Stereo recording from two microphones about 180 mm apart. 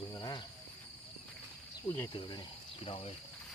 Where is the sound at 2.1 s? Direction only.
25° left (ahead or behind).